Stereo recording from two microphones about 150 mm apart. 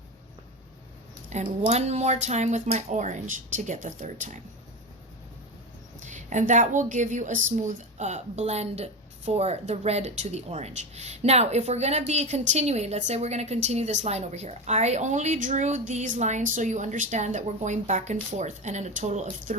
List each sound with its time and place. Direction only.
1.3 s a woman's voice: 55° right (ahead or behind)
6.0 s a woman's voice: 55° right (ahead or behind)